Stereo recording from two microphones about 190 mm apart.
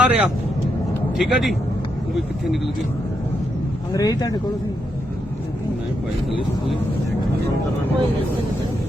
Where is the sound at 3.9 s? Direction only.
20° left (ahead or behind).